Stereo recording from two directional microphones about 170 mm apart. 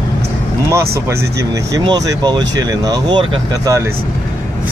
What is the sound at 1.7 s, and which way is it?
Speech, 20° right (ahead or behind).